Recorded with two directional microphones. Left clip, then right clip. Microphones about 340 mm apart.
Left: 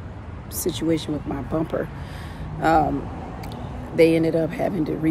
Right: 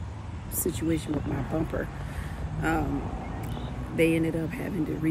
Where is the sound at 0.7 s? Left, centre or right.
Centre.